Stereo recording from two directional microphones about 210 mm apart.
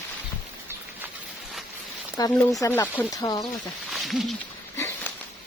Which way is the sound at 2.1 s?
15° left (ahead or behind).